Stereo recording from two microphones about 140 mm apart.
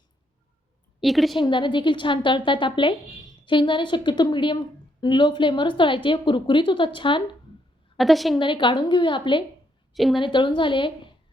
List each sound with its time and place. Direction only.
1.0 s a woman's voice: centre (ahead or behind)
1.4 s speech: 35° left (ahead or behind)
7.9 s a woman's voice: centre (ahead or behind)
8.4 s speech: 35° left (ahead or behind)
9.9 s a woman's voice: centre (ahead or behind)
10.2 s speech: 35° left (ahead or behind)